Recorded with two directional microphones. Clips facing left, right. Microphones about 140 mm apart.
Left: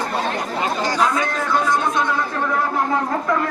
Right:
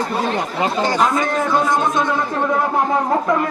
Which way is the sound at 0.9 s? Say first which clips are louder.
Right 3 dB; 20° right (ahead or behind).